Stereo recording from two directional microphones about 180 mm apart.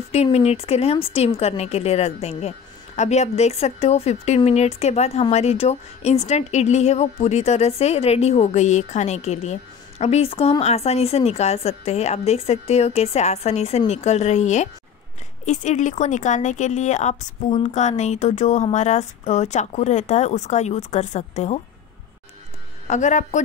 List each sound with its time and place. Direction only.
0.1 s speech: 35° left (ahead or behind)
22.8 s speech: 40° left (ahead or behind)